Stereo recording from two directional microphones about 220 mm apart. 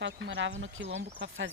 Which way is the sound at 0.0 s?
55° right (ahead or behind).